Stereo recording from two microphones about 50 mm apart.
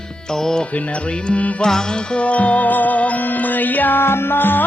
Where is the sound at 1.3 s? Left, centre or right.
Left.